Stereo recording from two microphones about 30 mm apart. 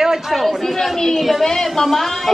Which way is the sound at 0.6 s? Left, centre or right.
Centre.